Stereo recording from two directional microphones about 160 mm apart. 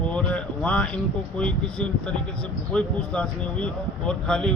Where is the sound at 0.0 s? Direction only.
5° left (ahead or behind).